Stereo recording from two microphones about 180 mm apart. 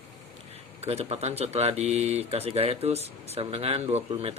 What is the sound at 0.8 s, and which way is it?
Speech, 35° right (ahead or behind).